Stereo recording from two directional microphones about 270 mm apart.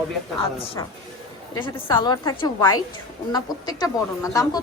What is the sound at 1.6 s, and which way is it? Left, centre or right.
Speech, centre.